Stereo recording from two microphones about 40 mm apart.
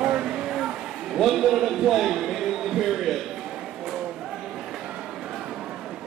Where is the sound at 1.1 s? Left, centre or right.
Centre.